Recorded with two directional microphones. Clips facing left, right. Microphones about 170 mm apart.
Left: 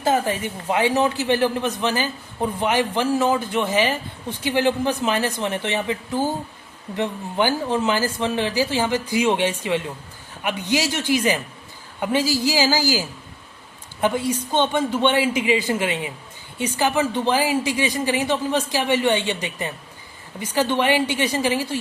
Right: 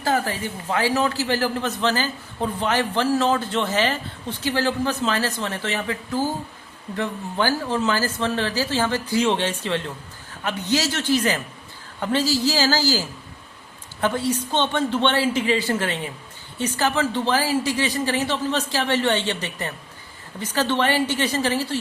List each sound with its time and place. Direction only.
0.0 s a man's voice: 20° left (ahead or behind)